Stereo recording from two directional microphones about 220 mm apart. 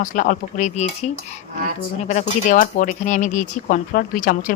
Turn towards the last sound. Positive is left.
turn(degrees=40)  # may be behind; listen again after turning